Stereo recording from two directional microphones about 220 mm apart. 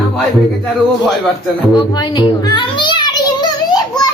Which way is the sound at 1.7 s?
20° left (ahead or behind).